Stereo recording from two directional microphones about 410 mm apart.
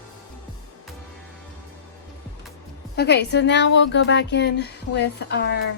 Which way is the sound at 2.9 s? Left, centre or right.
Left.